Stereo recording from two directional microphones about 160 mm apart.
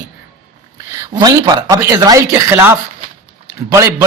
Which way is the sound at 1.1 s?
25° right (ahead or behind).